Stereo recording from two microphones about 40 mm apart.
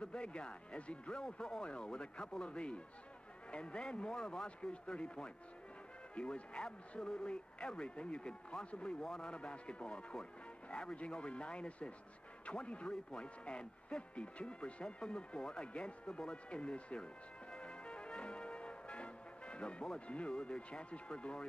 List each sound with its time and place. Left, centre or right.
0.0 s speech: left